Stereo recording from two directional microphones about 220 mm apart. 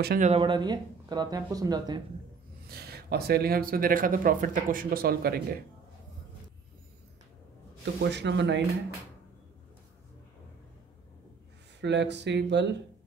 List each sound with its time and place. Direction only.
0.0 s speech: 40° right (ahead or behind)
0.3 s speech: 20° right (ahead or behind)
2.7 s speech: 45° right (ahead or behind)
7.8 s speech: 50° right (ahead or behind)
11.8 s speech: 50° right (ahead or behind)